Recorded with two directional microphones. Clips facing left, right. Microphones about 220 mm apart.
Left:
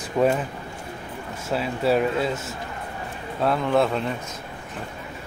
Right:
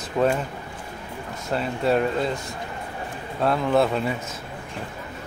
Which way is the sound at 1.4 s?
5° left (ahead or behind).